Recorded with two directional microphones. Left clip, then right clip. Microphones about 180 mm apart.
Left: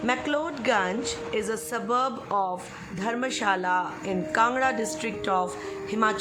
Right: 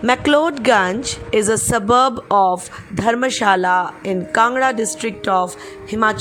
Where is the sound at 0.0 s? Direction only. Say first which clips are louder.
Right 12 dB; 50° right (ahead or behind).